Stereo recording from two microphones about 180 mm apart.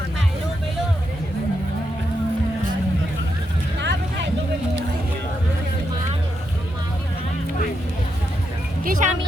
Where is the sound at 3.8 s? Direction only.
75° right (ahead or behind).